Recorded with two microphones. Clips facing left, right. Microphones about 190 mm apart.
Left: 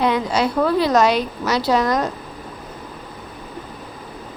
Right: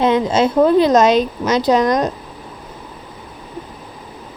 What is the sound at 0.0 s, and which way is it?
A woman's voice, 20° right (ahead or behind).